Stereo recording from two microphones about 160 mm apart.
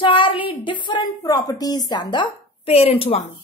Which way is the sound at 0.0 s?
30° left (ahead or behind).